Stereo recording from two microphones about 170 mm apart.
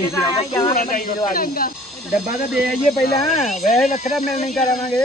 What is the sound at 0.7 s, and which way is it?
Speech, 55° left (ahead or behind).